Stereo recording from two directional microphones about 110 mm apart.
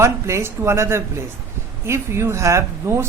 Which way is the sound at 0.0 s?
25° right (ahead or behind).